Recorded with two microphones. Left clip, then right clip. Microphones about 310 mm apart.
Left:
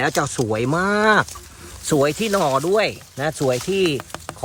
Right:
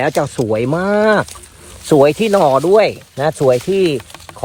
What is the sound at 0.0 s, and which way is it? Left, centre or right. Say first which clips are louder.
Speech: right 5 dB; centre.